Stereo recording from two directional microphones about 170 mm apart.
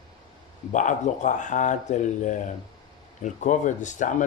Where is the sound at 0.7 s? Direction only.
45° left (ahead or behind).